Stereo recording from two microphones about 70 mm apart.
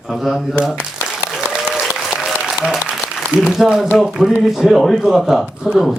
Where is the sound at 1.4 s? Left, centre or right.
Centre.